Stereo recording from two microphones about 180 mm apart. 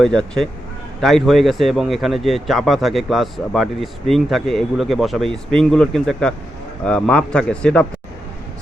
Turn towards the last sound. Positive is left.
turn(degrees=5)  # may be behind; listen again after turning